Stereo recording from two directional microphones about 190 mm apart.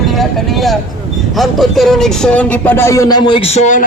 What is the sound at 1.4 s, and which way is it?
Speech, centre (ahead or behind).